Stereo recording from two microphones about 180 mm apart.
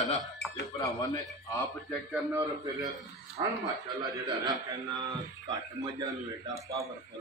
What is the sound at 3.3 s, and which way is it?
A man's voice, 20° right (ahead or behind).